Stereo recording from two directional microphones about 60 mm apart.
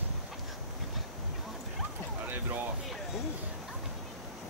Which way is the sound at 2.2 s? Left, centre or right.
Right.